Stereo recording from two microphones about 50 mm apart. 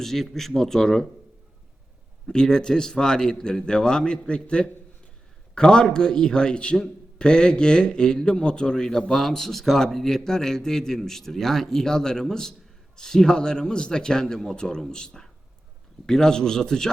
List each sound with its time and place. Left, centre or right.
0.0 s a man's voice: centre
2.2 s speech: centre